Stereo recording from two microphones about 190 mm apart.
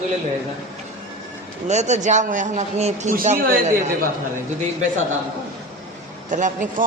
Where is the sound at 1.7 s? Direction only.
35° right (ahead or behind).